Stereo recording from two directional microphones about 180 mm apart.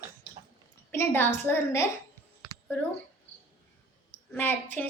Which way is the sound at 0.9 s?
10° left (ahead or behind).